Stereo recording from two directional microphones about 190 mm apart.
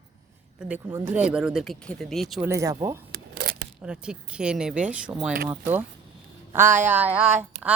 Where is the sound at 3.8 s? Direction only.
5° right (ahead or behind).